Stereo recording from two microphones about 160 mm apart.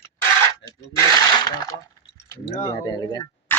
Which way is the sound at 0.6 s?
90° left.